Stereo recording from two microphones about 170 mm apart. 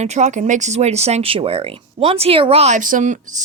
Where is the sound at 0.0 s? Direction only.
45° right (ahead or behind).